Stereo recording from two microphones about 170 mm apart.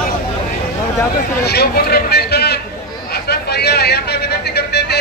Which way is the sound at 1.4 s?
70° left (ahead or behind).